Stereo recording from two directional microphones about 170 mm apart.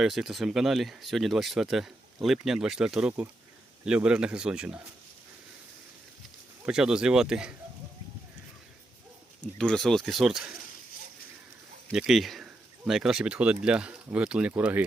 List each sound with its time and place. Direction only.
0.0 s speech: centre (ahead or behind)
6.7 s speech: 5° right (ahead or behind)
9.6 s speech: 5° left (ahead or behind)
11.9 s speech: centre (ahead or behind)